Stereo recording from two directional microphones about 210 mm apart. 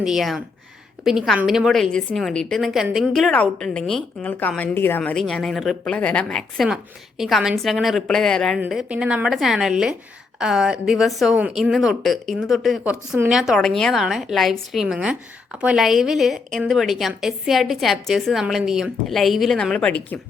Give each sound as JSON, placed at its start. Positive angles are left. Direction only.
{"t": 0.0, "sound": "a woman's voice", "side_deg": 0}